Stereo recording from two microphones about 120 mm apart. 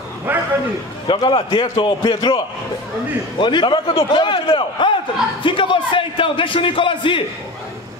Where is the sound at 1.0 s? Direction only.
45° left (ahead or behind).